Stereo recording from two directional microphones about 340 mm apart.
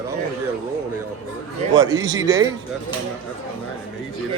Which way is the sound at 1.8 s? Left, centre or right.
Centre.